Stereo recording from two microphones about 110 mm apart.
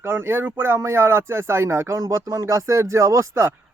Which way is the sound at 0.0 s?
20° right (ahead or behind).